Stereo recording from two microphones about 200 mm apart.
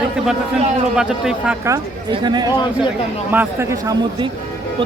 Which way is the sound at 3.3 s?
10° right (ahead or behind).